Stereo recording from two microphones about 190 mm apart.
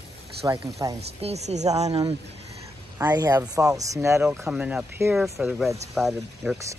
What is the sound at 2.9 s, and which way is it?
A woman's voice, 15° right (ahead or behind).